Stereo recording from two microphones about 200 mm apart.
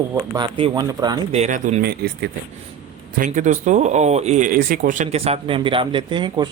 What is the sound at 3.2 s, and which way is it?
Speech, 35° right (ahead or behind).